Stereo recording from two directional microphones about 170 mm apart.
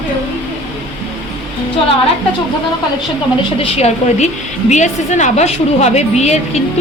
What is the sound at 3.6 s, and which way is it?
A woman's voice, 40° left (ahead or behind).